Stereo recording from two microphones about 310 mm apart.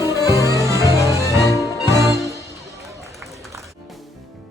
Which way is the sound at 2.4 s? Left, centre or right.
Centre.